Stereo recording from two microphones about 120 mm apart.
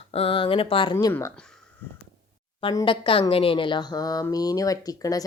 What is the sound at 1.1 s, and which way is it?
Speech, 25° left (ahead or behind).